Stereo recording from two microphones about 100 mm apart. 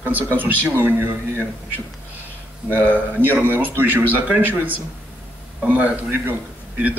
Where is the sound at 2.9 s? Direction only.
20° right (ahead or behind).